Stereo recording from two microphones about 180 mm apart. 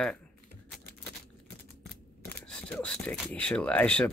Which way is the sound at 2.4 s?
5° left (ahead or behind).